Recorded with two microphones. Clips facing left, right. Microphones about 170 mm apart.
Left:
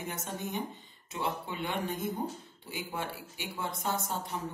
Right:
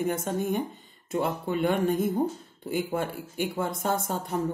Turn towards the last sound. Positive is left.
turn(degrees=-50)  # may be behind; listen again after turning